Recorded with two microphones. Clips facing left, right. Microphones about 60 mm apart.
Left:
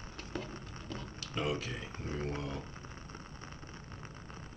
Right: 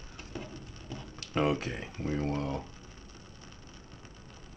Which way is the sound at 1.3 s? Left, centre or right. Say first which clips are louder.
Right 7 dB; right.